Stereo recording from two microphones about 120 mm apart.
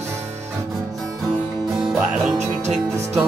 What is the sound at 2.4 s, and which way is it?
Music, 70° right (ahead or behind).